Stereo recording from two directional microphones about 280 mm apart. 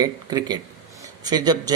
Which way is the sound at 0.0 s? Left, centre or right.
Centre.